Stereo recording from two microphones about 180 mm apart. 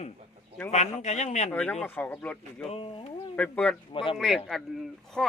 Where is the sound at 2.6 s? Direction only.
30° left (ahead or behind).